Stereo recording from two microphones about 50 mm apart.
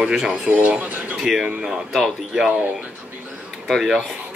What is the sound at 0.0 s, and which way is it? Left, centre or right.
Speech, centre.